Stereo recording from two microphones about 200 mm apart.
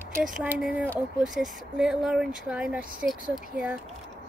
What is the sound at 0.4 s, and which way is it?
Speech, 5° right (ahead or behind).